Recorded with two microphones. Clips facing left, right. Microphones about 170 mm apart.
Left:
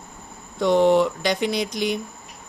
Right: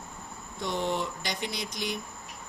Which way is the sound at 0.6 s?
85° left.